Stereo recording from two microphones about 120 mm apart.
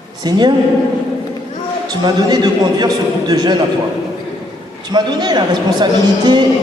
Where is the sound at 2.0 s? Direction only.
35° right (ahead or behind).